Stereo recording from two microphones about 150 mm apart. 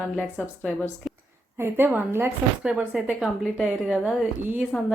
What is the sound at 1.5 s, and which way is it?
A woman's voice, 15° right (ahead or behind).